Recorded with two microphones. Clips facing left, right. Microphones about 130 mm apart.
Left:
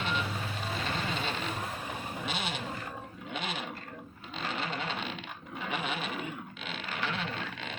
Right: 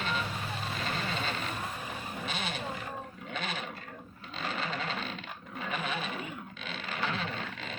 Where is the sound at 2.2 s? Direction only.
10° left (ahead or behind).